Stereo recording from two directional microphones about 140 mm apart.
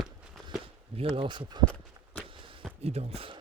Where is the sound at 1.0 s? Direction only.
40° right (ahead or behind).